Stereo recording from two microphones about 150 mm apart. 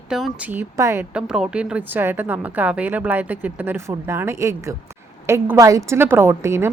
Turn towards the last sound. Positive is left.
turn(degrees=-15)  # may be behind; listen again after turning